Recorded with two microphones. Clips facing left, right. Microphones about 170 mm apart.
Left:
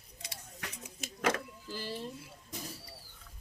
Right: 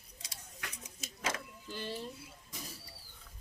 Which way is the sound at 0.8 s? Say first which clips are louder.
Left 7 dB; 60° left (ahead or behind).